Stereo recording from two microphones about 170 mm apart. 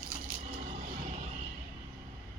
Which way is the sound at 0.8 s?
50° right (ahead or behind).